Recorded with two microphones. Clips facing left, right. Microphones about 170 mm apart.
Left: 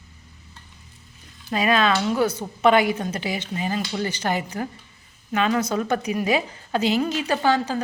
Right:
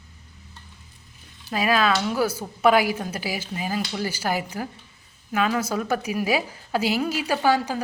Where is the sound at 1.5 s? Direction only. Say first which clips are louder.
Left 1 dB; 5° right (ahead or behind).